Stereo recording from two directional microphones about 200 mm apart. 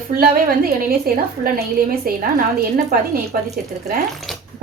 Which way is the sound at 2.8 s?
50° right (ahead or behind).